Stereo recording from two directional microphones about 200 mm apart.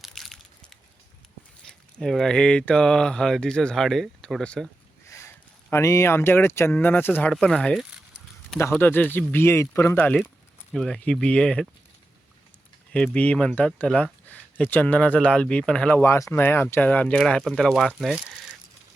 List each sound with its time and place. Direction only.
0.0 s a sound: centre (ahead or behind)
1.6 s speech: 5° left (ahead or behind)
5.0 s sniff: 15° left (ahead or behind)
5.7 s speech: 15° left (ahead or behind)
12.9 s speech: 5° left (ahead or behind)